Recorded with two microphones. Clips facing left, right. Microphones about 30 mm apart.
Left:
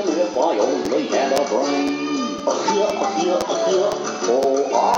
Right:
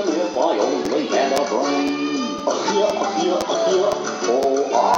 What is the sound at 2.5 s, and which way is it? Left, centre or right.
Music, centre.